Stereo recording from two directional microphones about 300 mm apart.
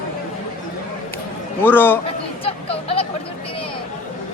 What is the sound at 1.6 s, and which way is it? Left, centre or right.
Speech, centre.